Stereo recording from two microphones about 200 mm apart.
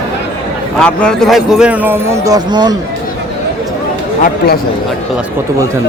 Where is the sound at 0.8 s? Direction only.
5° left (ahead or behind); by 2.8 s 20° right (ahead or behind).